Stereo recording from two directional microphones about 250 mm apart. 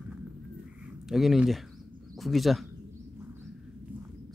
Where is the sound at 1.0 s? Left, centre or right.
Centre.